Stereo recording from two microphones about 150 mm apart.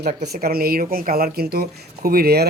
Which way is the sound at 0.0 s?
90° right.